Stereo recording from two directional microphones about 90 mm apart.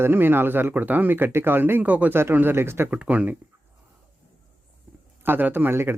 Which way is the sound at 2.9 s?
15° right (ahead or behind).